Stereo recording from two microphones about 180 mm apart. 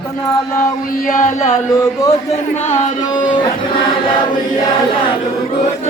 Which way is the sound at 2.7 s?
40° left (ahead or behind).